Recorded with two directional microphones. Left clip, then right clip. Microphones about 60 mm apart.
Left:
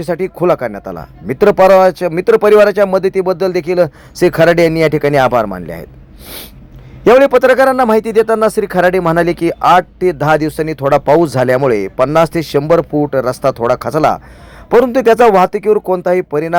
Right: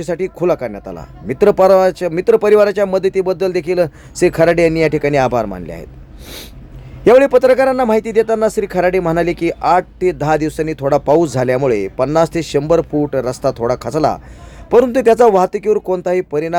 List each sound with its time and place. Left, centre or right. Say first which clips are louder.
0.0 s speech: left 3 dB; left
6.2 s snort: left 2 dB; centre
7.0 s a man's voice: left 2 dB; left